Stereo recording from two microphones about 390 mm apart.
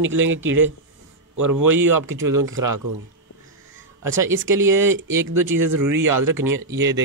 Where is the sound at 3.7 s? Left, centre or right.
Right.